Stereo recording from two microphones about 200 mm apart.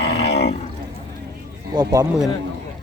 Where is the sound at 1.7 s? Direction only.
20° right (ahead or behind).